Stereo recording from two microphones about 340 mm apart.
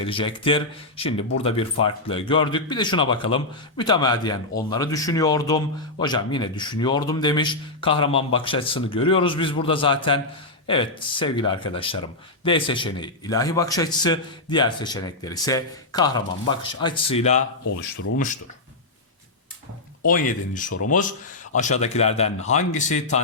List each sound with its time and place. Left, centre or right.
0.0 s speech: centre
20.1 s speech: left
20.7 s speech: left
21.5 s speech: left